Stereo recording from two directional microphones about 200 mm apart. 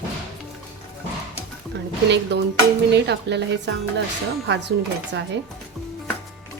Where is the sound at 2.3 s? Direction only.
60° right (ahead or behind).